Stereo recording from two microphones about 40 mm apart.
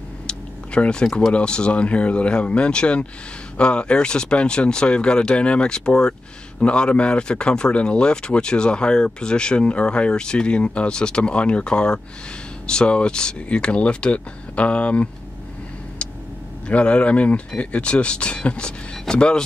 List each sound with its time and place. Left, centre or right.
0.3 s a sound: left
1.3 s speech: left
16.6 s a man's voice: left